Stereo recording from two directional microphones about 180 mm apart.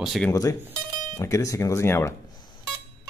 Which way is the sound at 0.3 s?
20° left (ahead or behind).